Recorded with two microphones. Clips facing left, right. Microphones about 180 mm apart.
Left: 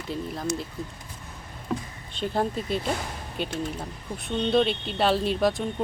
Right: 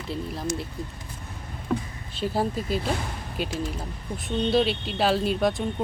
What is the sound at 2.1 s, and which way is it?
Speech, 5° right (ahead or behind).